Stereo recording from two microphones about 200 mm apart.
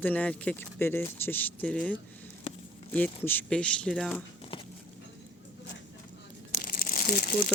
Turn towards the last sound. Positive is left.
turn(degrees=45)  # may be behind; listen again after turning